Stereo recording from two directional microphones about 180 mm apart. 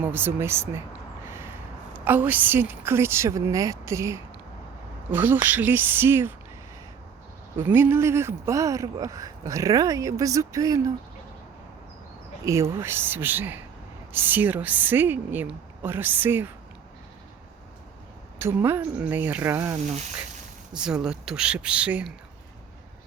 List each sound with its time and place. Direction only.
0.0 s speech: 10° right (ahead or behind)
1.3 s a sound: 15° right (ahead or behind)
2.0 s speech: 10° right (ahead or behind)
7.5 s speech: 10° right (ahead or behind)
12.5 s speech: 15° right (ahead or behind)
18.3 s speech: 15° right (ahead or behind)